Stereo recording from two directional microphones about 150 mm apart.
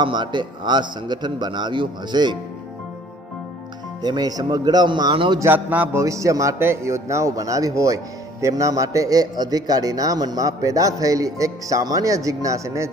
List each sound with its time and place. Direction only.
0.0 s speech: 30° right (ahead or behind)
4.0 s speech: 25° right (ahead or behind)
5.4 s speech: 10° right (ahead or behind)